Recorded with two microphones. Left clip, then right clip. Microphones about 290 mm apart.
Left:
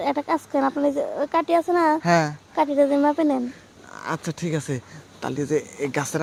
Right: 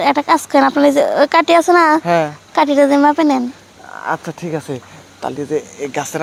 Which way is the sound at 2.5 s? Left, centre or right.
Right.